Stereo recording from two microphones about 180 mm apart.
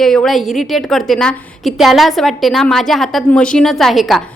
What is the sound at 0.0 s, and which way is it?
A woman's voice, centre (ahead or behind).